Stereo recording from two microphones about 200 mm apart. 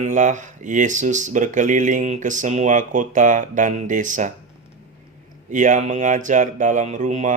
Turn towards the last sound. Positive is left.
turn(degrees=-35)  # may be behind; listen again after turning